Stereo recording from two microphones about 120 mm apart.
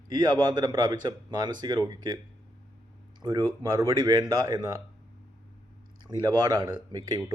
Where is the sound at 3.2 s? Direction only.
40° right (ahead or behind).